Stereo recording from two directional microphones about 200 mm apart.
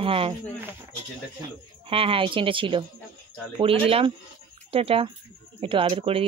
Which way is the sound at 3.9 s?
30° right (ahead or behind).